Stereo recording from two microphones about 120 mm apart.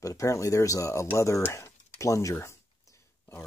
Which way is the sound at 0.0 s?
30° left (ahead or behind).